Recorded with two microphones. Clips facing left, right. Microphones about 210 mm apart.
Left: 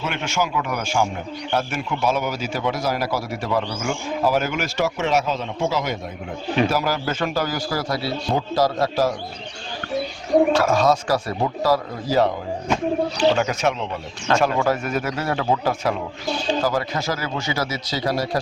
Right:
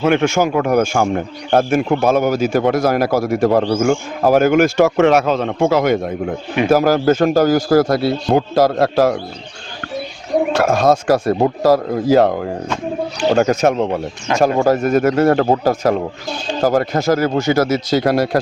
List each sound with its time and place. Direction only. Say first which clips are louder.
0.0 s a man's voice: right 11 dB; 50° right (ahead or behind)
10.5 s speech: right 4 dB; 50° right (ahead or behind)